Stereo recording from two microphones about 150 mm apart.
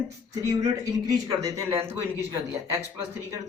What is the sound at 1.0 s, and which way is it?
Speech, 20° right (ahead or behind).